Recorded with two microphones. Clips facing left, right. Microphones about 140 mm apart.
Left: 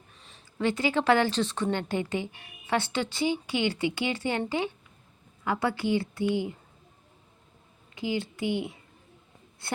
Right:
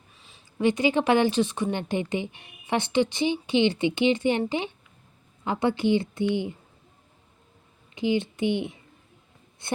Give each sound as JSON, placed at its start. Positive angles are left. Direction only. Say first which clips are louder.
{"t": 0.2, "sound": "a sound", "louder": "even", "side_deg": 0}
{"t": 0.6, "sound": "speech", "louder": "right 4 dB", "side_deg": -20}
{"t": 7.9, "sound": "speech", "louder": "right 6 dB", "side_deg": -20}